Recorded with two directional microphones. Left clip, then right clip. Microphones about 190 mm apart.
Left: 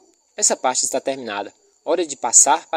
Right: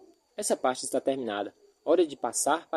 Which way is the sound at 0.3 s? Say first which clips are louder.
Left 8 dB; 40° left (ahead or behind).